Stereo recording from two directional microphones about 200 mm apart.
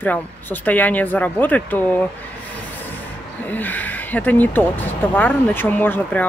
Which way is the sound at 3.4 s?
10° left (ahead or behind).